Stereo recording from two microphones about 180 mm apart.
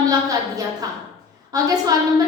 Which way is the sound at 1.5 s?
20° right (ahead or behind).